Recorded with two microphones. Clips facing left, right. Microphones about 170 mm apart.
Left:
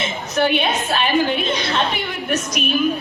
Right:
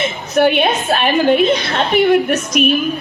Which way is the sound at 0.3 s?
60° right (ahead or behind).